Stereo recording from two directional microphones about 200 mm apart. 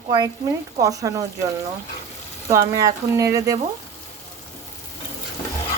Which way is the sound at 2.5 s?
15° right (ahead or behind).